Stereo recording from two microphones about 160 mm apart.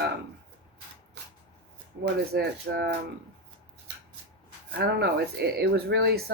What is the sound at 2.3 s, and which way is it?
Speech, 85° right.